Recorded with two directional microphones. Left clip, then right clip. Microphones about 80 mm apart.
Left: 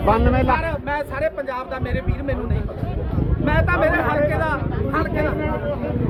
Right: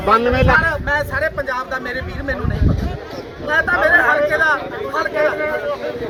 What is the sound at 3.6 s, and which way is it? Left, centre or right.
Speech, centre.